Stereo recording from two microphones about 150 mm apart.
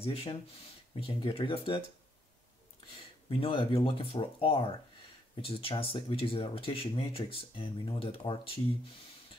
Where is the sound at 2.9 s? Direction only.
40° left (ahead or behind).